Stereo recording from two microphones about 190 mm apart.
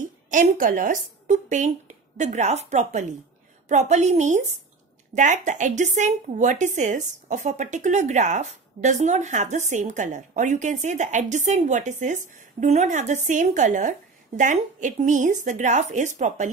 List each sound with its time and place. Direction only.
0.3 s speech: 45° right (ahead or behind)